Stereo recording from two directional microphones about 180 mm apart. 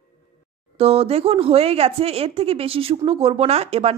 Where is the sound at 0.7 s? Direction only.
35° right (ahead or behind).